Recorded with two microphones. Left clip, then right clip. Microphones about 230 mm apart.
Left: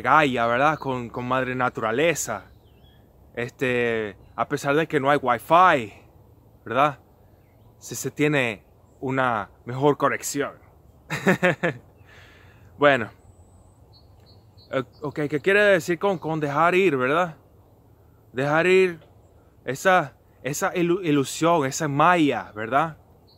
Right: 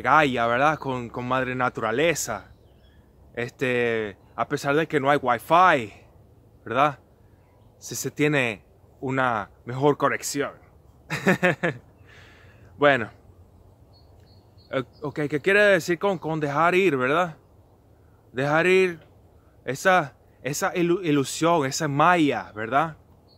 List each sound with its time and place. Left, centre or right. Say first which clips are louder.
0.0 s speech: left 1 dB; centre
11.1 s a sound: left 1 dB; centre
14.7 s speech: left 1 dB; centre